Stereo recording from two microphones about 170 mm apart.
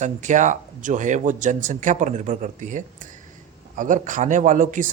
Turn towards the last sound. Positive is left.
turn(degrees=-50)  # may be behind; listen again after turning